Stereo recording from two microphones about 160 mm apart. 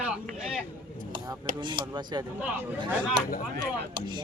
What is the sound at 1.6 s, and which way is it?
Speech, 30° right (ahead or behind).